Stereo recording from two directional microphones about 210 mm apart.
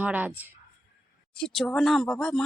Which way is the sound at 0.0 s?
5° right (ahead or behind).